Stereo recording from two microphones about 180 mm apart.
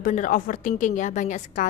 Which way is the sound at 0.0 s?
45° left (ahead or behind).